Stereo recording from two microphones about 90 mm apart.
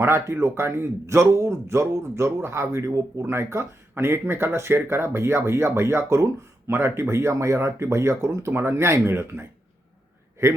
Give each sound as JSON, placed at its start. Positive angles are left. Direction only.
{"t": 0.0, "sound": "speech", "side_deg": -30}